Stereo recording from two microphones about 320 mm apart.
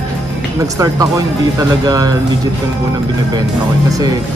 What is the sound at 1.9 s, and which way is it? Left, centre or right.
Speech, centre.